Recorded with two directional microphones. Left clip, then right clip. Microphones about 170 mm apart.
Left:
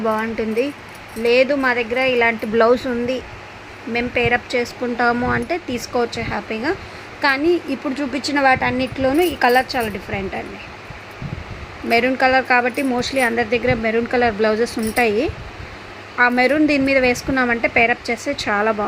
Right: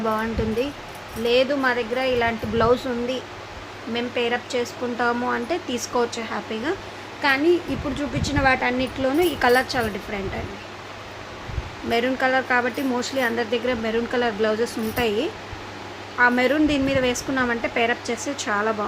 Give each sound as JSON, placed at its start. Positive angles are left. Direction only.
{"t": 0.0, "sound": "speech", "side_deg": 25}
{"t": 11.9, "sound": "speech", "side_deg": 35}
{"t": 16.1, "sound": "speech", "side_deg": 35}